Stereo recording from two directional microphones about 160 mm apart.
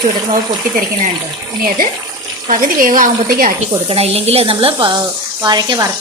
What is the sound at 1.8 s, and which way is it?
A woman's voice, 65° right (ahead or behind).